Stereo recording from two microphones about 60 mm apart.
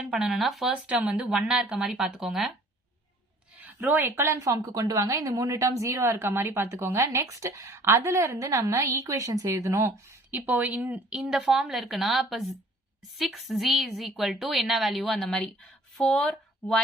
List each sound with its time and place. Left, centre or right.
0.0 s a woman's voice: centre
0.7 s speech: right
0.9 s speech: centre
3.6 s a sound: right
4.1 s speech: right
4.4 s a woman's voice: right
9.5 s speech: right
10.3 s speech: right
11.1 s a woman's voice: centre